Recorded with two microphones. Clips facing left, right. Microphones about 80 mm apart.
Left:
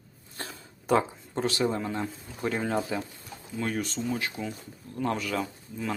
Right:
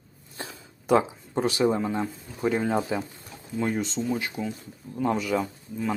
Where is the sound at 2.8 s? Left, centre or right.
Centre.